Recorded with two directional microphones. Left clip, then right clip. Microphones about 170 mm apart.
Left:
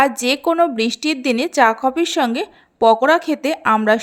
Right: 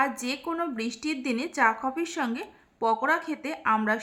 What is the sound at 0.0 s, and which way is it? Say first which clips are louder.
A woman's voice: left 12 dB; 45° left (ahead or behind).